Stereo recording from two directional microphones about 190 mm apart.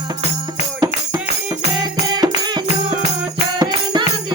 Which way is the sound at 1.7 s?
20° right (ahead or behind).